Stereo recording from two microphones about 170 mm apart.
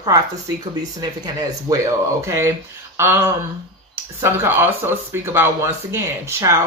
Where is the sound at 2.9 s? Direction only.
15° right (ahead or behind).